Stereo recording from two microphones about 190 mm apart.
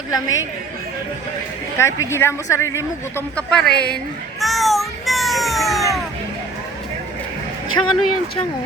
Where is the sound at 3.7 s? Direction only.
55° left (ahead or behind).